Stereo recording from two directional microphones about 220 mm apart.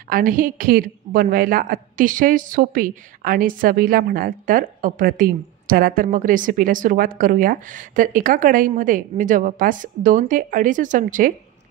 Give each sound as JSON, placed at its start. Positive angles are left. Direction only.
{"t": 0.1, "sound": "a woman's voice", "side_deg": -40}